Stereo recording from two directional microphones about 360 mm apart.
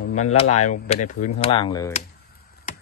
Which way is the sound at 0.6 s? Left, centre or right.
Centre.